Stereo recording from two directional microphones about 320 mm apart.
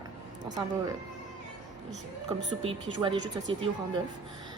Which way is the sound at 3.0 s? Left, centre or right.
Centre.